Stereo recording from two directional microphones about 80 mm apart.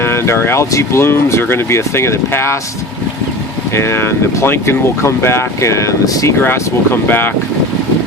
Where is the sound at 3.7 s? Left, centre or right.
Left.